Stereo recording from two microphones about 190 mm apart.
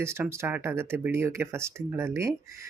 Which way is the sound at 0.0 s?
15° right (ahead or behind).